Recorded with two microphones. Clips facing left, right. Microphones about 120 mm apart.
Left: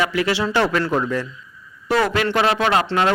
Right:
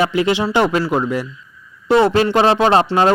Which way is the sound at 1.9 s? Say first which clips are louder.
Right 6 dB; 25° right (ahead or behind).